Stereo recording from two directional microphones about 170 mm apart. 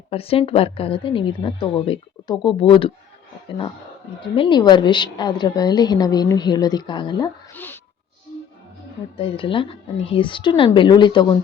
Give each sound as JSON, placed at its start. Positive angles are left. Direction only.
{"t": 0.1, "sound": "a woman's voice", "side_deg": 35}
{"t": 4.2, "sound": "a woman's voice", "side_deg": 30}
{"t": 7.5, "sound": "a sound", "side_deg": 10}
{"t": 9.1, "sound": "a woman's voice", "side_deg": 30}